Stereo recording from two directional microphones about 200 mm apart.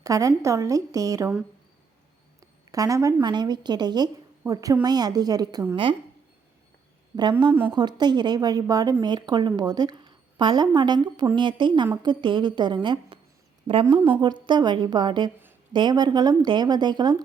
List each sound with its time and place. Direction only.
0.0 s a woman's voice: 15° right (ahead or behind)
2.7 s a woman's voice: 15° right (ahead or behind)
7.2 s a woman's voice: 20° right (ahead or behind)
14.2 s a woman's voice: 20° right (ahead or behind)